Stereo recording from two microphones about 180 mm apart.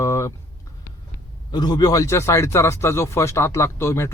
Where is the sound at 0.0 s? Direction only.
15° left (ahead or behind).